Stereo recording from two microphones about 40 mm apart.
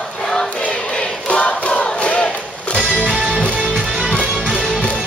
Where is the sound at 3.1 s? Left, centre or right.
Right.